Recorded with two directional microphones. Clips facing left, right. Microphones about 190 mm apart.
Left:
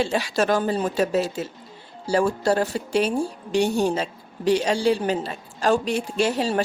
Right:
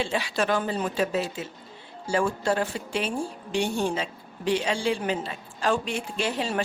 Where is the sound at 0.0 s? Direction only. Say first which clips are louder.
Left 4 dB; 40° left (ahead or behind).